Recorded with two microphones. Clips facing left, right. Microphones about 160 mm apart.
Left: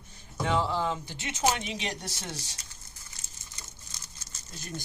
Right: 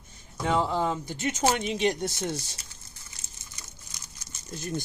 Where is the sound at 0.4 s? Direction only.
40° right (ahead or behind).